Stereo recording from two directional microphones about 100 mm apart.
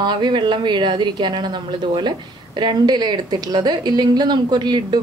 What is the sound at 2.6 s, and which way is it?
A woman's voice, 45° right (ahead or behind).